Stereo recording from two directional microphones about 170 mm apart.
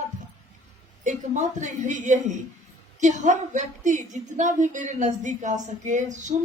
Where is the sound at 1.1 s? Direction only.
45° right (ahead or behind).